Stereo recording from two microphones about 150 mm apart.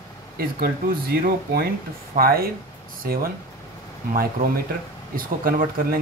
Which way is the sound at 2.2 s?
85° right.